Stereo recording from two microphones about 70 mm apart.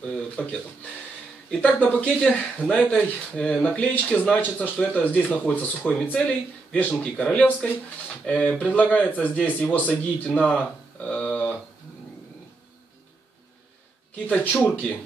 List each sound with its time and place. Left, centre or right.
1.5 s speech: centre
2.0 s speech: centre
11.1 s a sound: centre
14.1 s speech: left